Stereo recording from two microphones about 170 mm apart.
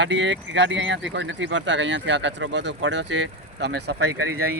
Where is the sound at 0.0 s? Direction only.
90° right.